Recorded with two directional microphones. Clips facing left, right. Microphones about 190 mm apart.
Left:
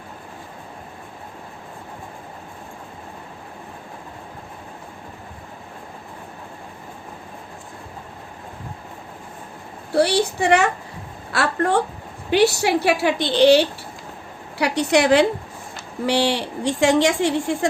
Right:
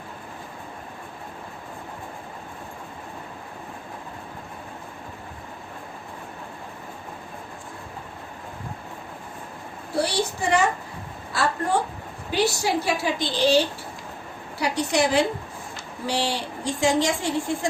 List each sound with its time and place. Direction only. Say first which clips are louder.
10.0 s a woman's voice: left 6 dB; 70° left (ahead or behind)
14.6 s a woman's voice: left 5 dB; 65° left (ahead or behind)